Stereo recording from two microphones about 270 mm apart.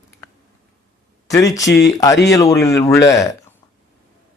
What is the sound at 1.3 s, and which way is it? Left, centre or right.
Speech, centre.